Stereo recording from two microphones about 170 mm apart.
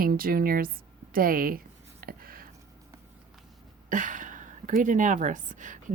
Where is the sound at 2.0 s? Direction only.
60° right (ahead or behind).